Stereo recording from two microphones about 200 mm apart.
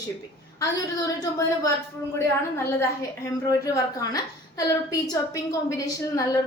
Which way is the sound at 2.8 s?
15° left (ahead or behind).